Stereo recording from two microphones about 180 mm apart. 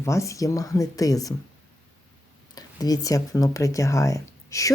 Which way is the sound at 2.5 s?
20° left (ahead or behind).